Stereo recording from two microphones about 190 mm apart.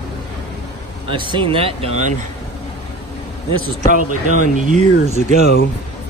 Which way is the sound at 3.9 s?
40° right (ahead or behind).